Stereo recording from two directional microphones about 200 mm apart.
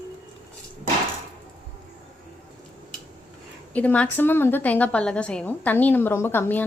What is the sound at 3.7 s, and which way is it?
A woman's voice, 5° left (ahead or behind).